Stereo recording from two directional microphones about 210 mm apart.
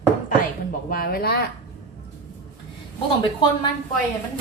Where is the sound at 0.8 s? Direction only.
45° left (ahead or behind).